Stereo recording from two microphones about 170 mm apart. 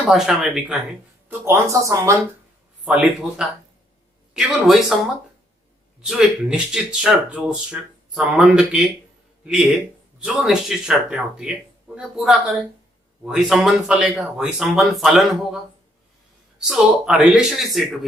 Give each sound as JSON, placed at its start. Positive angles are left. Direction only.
{"t": 0.1, "sound": "speech", "side_deg": 0}
{"t": 1.5, "sound": "speech", "side_deg": -15}
{"t": 2.8, "sound": "speech", "side_deg": -5}
{"t": 6.0, "sound": "speech", "side_deg": -5}
{"t": 10.2, "sound": "speech", "side_deg": 0}
{"t": 16.6, "sound": "speech", "side_deg": -5}